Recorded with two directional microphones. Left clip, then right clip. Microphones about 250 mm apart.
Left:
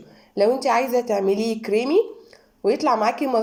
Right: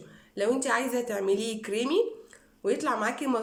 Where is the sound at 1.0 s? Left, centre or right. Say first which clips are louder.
Left 7 dB; centre.